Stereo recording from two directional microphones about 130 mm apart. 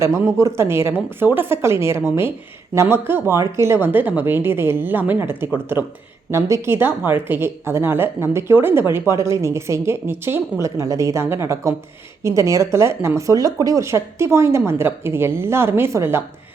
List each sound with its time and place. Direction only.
0.3 s a woman's voice: 25° right (ahead or behind)